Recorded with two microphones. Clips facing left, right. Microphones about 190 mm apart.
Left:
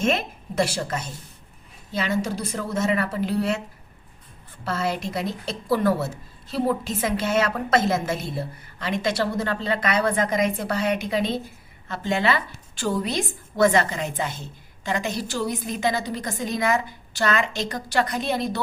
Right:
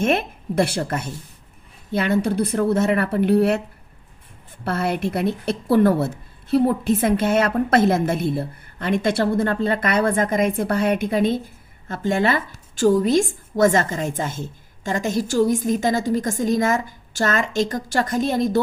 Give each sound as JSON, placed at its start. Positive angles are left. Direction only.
{"t": 0.0, "sound": "speech", "side_deg": -55}
{"t": 4.6, "sound": "a woman's voice", "side_deg": -60}